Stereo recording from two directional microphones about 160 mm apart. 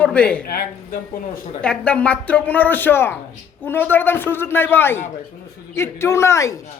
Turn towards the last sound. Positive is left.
turn(degrees=20)  # may be behind; listen again after turning